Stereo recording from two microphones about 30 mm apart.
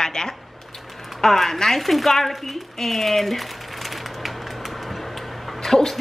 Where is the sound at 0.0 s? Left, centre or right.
Left.